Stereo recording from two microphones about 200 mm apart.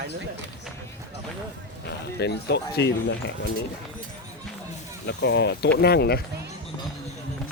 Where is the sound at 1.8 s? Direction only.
55° left (ahead or behind).